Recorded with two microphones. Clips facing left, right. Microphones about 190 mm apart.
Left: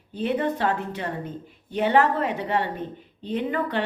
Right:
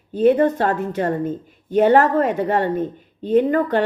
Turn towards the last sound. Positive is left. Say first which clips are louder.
# right 10 dB
turn(degrees=-45)  # may be behind; listen again after turning